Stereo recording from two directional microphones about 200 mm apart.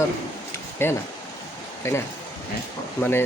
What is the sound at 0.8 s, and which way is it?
Speech, 10° left (ahead or behind).